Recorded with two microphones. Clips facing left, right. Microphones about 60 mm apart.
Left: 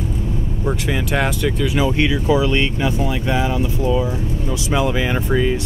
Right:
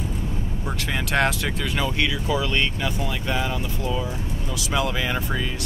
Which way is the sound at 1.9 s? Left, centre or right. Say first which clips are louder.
Left 7 dB; left.